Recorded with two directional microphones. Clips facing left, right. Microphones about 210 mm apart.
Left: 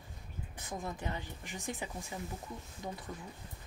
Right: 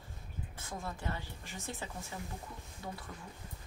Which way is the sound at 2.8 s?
15° left (ahead or behind).